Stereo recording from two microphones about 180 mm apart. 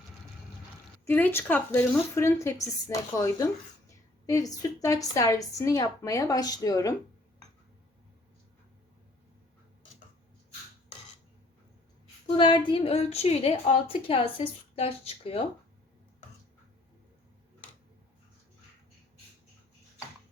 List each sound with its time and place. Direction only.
1.0 s a woman's voice: 10° left (ahead or behind)
12.4 s a woman's voice: 25° left (ahead or behind)